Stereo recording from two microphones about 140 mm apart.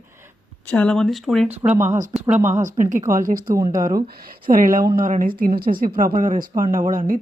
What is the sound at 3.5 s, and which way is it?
Speech, 25° right (ahead or behind).